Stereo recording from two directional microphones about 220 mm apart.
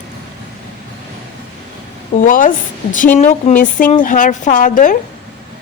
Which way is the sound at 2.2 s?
35° left (ahead or behind).